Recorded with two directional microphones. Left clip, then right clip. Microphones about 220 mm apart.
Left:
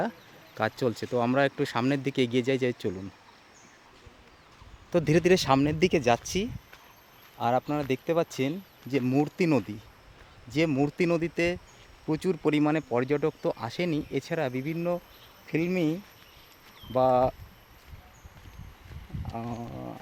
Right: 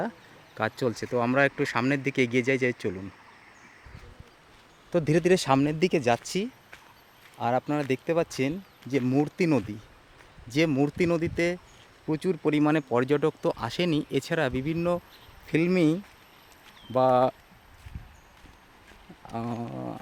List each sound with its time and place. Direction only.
0.5 s speech: centre (ahead or behind)
4.9 s speech: centre (ahead or behind)
19.3 s speech: 15° right (ahead or behind)